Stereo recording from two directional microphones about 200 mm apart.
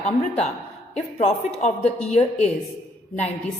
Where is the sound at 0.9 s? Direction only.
30° left (ahead or behind).